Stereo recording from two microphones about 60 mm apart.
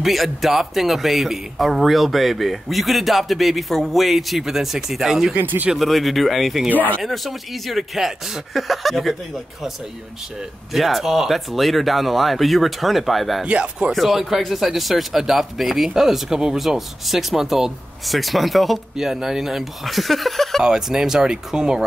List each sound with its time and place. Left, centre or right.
0.0 s speech: centre
5.4 s speech: right
5.8 s speech: centre
10.7 s speech: centre
13.4 s speech: centre
13.9 s speech: centre
20.6 s speech: centre